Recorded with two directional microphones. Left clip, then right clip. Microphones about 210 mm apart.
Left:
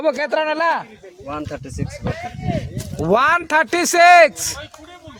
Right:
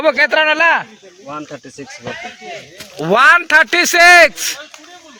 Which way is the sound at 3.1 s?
5° left (ahead or behind).